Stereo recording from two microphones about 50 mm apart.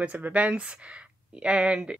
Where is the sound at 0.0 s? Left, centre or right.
Right.